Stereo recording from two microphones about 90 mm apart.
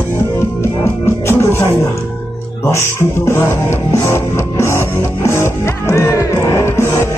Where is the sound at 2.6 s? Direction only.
30° left (ahead or behind).